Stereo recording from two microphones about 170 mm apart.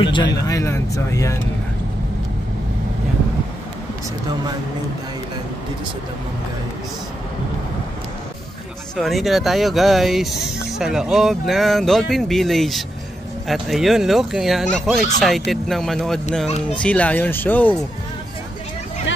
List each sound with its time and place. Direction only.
0.0 s speech: 25° left (ahead or behind)
8.9 s speech: centre (ahead or behind)